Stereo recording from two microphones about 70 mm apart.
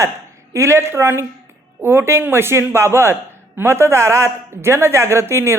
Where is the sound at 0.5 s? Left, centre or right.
Right.